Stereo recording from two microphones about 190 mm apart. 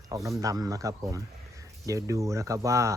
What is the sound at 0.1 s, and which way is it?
Speech, 15° right (ahead or behind).